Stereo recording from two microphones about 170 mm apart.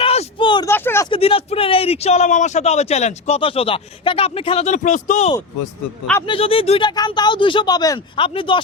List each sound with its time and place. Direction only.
0.0 s a sound: 35° left (ahead or behind)
0.7 s speech: 15° left (ahead or behind)
1.1 s a man's voice: 35° left (ahead or behind)
6.2 s speech: 35° left (ahead or behind)